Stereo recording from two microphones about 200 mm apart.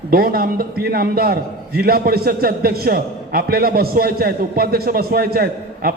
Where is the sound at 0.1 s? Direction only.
50° right (ahead or behind).